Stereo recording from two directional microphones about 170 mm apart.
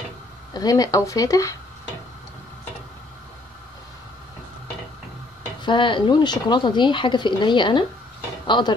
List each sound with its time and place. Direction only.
0.5 s speech: 20° left (ahead or behind)
5.6 s speech: 30° left (ahead or behind)